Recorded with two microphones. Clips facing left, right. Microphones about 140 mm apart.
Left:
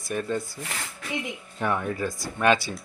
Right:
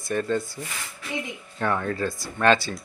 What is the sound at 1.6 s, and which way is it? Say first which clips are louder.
Speech: right 1 dB; 15° left (ahead or behind).